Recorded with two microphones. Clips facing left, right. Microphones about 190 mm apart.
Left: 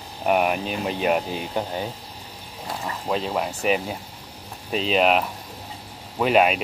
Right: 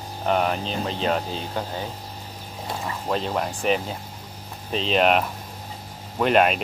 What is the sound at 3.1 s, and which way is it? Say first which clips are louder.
Speech: left 1 dB; 5° left (ahead or behind).